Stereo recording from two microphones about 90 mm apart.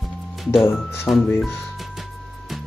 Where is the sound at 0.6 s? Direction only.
25° left (ahead or behind).